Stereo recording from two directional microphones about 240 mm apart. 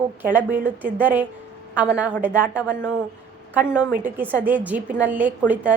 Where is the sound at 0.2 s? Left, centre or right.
Centre.